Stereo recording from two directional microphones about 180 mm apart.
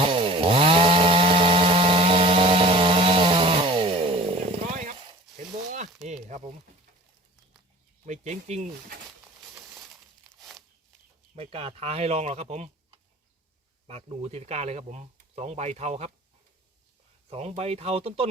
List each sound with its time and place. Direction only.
0.0 s chainsaw: 30° right (ahead or behind)
6.2 s a sound: 40° right (ahead or behind)
8.0 s speech: 40° right (ahead or behind)
9.6 s crushing: centre (ahead or behind)
11.3 s speech: 35° right (ahead or behind)
13.8 s speech: 35° right (ahead or behind)
17.2 s speech: 35° right (ahead or behind)